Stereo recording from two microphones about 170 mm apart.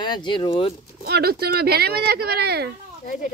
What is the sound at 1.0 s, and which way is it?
Speech, 65° right (ahead or behind).